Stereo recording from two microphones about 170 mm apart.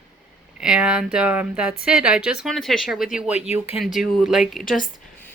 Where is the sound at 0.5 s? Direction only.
5° right (ahead or behind).